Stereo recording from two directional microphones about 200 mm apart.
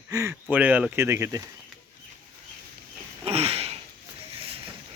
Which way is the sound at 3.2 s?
30° right (ahead or behind).